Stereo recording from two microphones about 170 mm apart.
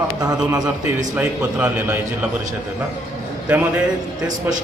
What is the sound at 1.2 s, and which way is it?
Speech, 10° right (ahead or behind).